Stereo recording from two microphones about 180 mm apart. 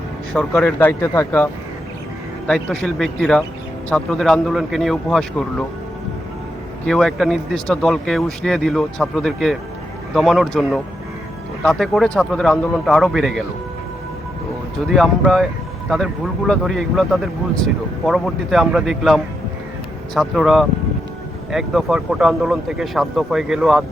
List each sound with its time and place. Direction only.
0.3 s speech: 10° left (ahead or behind)
2.5 s speech: 5° left (ahead or behind)
6.8 s speech: 5° left (ahead or behind)
14.8 s speech: centre (ahead or behind)